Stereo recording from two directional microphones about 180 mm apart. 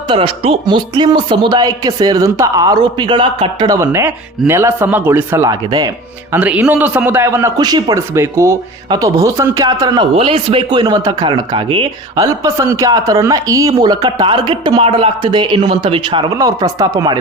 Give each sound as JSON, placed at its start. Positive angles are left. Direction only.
{"t": 0.1, "sound": "a man's voice", "side_deg": -30}
{"t": 6.3, "sound": "a man's voice", "side_deg": -10}